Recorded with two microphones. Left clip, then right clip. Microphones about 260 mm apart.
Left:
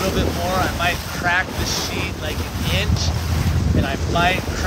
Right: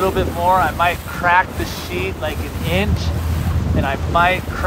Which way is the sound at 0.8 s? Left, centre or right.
Centre.